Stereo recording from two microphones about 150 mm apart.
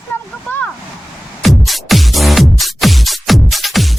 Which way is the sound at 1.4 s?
Centre (ahead or behind).